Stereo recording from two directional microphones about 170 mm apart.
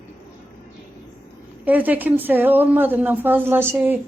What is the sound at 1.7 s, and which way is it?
Speech, 10° right (ahead or behind).